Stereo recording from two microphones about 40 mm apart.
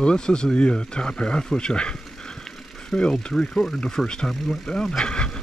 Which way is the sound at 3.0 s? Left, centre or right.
Left.